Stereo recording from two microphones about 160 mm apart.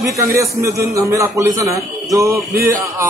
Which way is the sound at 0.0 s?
20° right (ahead or behind).